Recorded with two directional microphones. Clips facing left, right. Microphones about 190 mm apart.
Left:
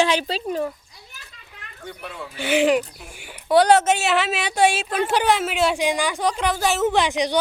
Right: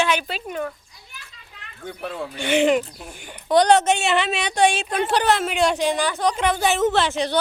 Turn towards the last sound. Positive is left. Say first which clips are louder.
# left 1 dB
turn(degrees=15)  # may be behind; listen again after turning